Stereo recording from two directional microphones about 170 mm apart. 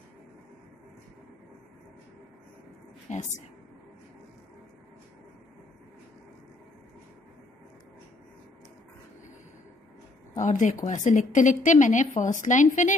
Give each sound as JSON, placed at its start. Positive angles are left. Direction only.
{"t": 3.1, "sound": "a woman's voice", "side_deg": 45}
{"t": 10.3, "sound": "a woman's voice", "side_deg": 45}